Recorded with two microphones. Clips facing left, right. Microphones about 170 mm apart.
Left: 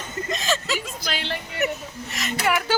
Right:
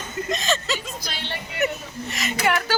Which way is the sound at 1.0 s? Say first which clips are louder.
Left 4 dB; 90° left.